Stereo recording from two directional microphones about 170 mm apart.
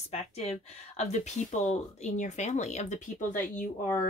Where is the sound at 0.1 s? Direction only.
40° left (ahead or behind).